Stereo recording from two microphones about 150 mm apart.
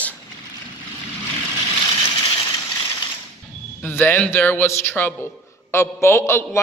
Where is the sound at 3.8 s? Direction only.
15° left (ahead or behind).